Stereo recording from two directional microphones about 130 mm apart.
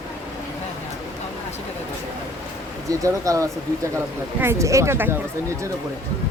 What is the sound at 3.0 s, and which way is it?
Speech, 25° right (ahead or behind).